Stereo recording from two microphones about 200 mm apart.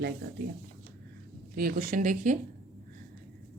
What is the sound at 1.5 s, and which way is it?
Speech, 45° right (ahead or behind).